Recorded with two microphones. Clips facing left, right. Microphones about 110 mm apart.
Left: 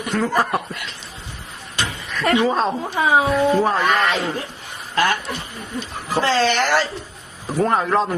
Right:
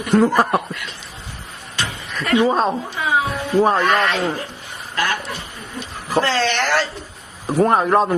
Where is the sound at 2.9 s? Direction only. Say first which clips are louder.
Left 7 dB; 45° left (ahead or behind).